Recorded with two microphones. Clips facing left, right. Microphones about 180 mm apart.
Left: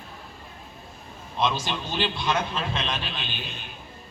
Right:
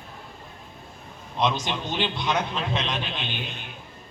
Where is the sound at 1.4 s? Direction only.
20° right (ahead or behind).